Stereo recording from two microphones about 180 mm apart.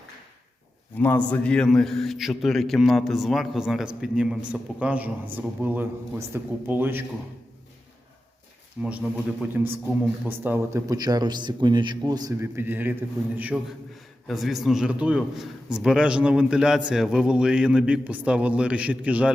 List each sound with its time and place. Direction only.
0.9 s a man's voice: 10° left (ahead or behind); by 7.0 s 10° right (ahead or behind)
8.8 s a man's voice: 5° right (ahead or behind)